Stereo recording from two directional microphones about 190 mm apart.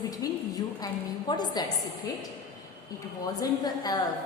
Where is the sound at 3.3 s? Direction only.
20° left (ahead or behind).